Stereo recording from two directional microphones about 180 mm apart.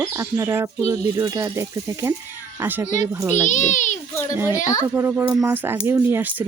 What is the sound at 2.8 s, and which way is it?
A child's voice, 40° left (ahead or behind).